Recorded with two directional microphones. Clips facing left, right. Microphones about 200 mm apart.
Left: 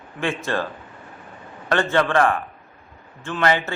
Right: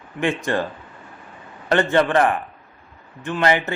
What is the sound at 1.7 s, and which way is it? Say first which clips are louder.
A man's voice: right 2 dB; 20° right (ahead or behind).